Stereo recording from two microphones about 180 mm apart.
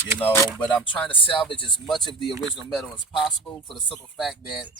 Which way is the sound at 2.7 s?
Centre (ahead or behind).